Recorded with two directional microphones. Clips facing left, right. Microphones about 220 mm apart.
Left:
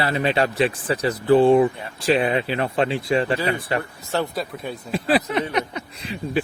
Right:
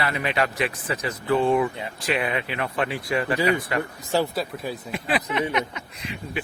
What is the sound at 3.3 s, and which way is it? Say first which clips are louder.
Speech: right 1 dB; 15° right (ahead or behind).